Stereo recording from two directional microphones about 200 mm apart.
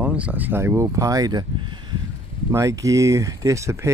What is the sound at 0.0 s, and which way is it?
Speech, 5° right (ahead or behind).